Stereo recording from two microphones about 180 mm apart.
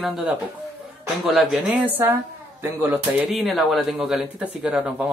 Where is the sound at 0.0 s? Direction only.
5° right (ahead or behind).